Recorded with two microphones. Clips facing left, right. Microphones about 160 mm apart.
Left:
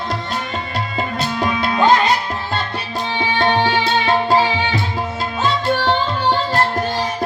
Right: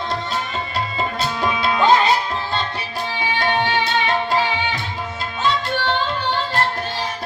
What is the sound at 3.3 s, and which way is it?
Tabla, 35° left (ahead or behind).